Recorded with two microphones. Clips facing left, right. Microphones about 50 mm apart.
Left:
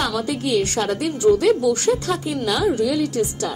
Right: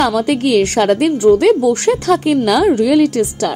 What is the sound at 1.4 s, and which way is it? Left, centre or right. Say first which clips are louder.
A woman's voice: right 6 dB; right.